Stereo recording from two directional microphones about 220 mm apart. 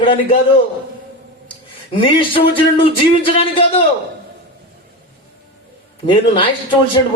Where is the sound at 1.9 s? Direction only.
25° left (ahead or behind).